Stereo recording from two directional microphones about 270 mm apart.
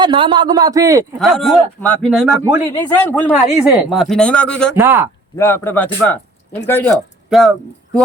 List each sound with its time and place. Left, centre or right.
0.0 s a man's voice: centre
1.2 s speech: centre
4.7 s a man's voice: centre
5.4 s speech: centre